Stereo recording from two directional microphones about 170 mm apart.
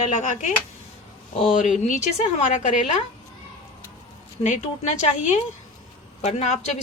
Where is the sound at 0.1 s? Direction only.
45° left (ahead or behind).